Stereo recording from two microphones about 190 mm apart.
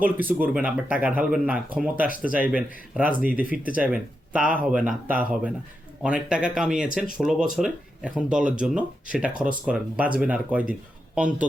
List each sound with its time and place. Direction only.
0.0 s speech: 10° right (ahead or behind)
2.0 s speech: 45° left (ahead or behind)
2.3 s speech: 5° right (ahead or behind)